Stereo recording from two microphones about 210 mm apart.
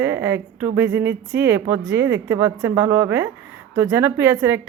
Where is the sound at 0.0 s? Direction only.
10° right (ahead or behind).